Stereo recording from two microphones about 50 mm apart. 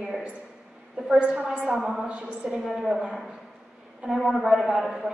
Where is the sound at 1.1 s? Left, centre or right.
Right.